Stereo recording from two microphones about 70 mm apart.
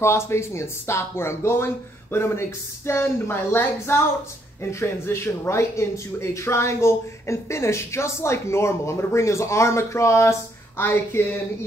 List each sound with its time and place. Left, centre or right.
0.0 s speech: left
10.8 s speech: left